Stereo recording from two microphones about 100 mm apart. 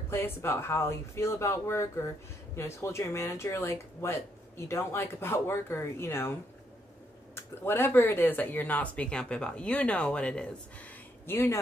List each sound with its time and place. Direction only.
0.1 s speech: 25° left (ahead or behind)
7.3 s speech: 25° left (ahead or behind)
11.2 s speech: 20° left (ahead or behind)